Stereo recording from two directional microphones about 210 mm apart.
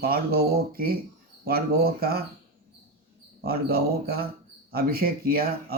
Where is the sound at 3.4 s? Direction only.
45° right (ahead or behind).